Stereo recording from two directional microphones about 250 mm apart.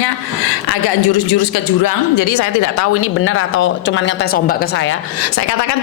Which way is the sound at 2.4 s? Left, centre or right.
Left.